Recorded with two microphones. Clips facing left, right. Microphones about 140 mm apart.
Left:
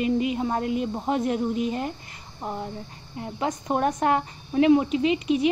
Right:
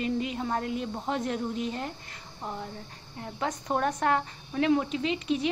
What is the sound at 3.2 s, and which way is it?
Speech, 15° left (ahead or behind).